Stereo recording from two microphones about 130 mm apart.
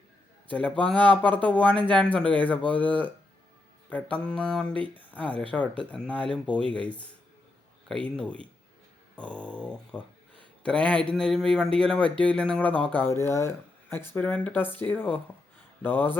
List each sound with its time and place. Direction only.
0.5 s speech: 10° left (ahead or behind)